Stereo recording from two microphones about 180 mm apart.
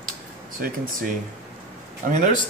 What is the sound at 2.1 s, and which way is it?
Speech, 45° right (ahead or behind).